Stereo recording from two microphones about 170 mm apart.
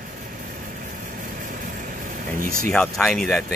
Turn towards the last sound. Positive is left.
turn(degrees=0)  # may be behind; listen again after turning